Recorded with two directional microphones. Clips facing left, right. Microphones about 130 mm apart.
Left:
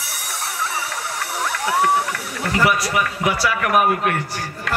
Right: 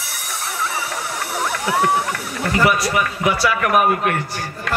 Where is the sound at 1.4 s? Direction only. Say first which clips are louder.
Even; 20° right (ahead or behind).